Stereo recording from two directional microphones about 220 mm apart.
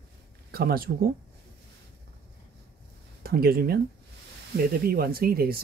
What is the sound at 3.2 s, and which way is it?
Speech, 45° right (ahead or behind).